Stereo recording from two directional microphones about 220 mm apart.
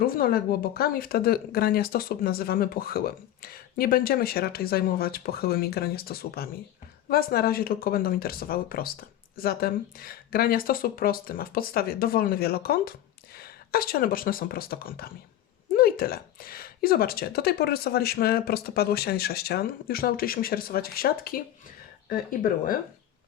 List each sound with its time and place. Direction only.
0.0 s speech: 40° left (ahead or behind)